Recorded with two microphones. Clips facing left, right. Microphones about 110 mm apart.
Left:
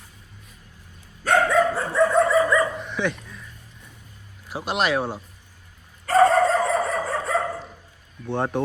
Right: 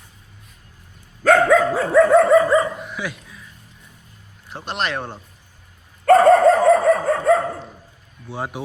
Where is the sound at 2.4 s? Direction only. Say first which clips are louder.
Right 4 dB; 30° right (ahead or behind).